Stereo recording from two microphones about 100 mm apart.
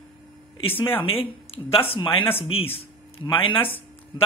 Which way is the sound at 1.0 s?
65° left (ahead or behind).